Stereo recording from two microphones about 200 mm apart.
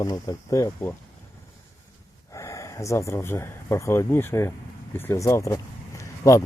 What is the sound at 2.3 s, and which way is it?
Speech, 15° left (ahead or behind).